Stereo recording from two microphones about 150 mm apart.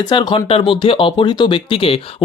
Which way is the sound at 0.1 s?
30° left (ahead or behind).